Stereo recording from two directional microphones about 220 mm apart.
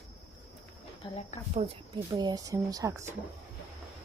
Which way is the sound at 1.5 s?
20° right (ahead or behind).